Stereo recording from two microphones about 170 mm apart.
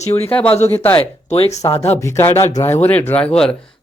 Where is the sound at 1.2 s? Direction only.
40° left (ahead or behind).